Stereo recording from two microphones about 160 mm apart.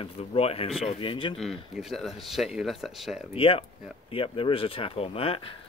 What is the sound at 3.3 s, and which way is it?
Speech, 35° left (ahead or behind).